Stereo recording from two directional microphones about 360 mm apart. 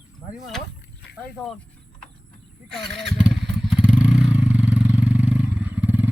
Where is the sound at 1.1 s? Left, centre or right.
Left.